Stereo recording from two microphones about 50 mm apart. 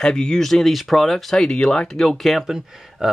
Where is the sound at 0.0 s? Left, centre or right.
Centre.